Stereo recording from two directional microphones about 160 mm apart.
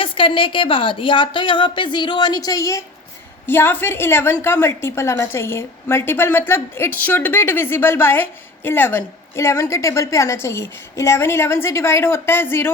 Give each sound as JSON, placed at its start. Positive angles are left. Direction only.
{"t": 0.0, "sound": "a woman's voice", "side_deg": 35}